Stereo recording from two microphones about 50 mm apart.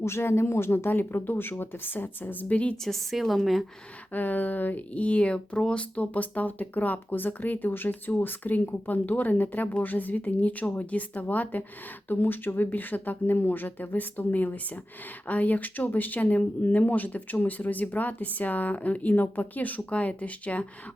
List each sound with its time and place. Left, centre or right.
0.0 s speech: left
0.9 s speech: left
2.8 s a woman's voice: centre
4.1 s speech: left; by 5.8 s centre
6.0 s speech: left